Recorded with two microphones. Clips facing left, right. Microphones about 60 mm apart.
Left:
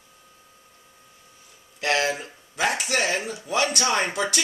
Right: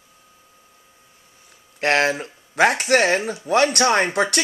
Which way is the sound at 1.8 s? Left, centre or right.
Right.